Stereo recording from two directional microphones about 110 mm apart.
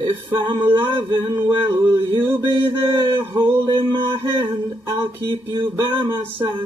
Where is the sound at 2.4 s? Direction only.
45° right (ahead or behind).